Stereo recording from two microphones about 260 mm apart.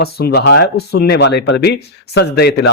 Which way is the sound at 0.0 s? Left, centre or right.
Left.